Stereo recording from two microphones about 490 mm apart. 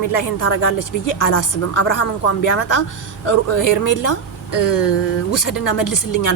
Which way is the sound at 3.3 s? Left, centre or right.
Left.